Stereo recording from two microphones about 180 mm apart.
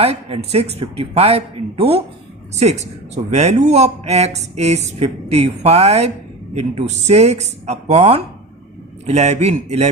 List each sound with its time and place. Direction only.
0.0 s speech: 35° right (ahead or behind)